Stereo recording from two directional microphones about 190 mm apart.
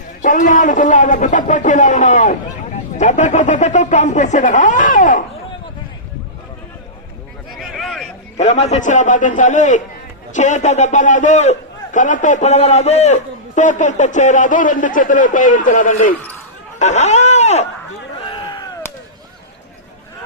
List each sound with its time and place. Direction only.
0.2 s a man's voice: 45° left (ahead or behind)
7.5 s a sound: centre (ahead or behind)
8.4 s a man's voice: 35° left (ahead or behind)